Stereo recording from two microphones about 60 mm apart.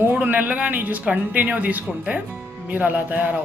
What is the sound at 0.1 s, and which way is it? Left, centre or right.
Speech, right.